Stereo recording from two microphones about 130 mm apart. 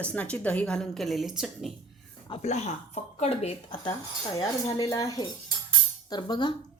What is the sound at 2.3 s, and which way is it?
Speech, 60° left (ahead or behind).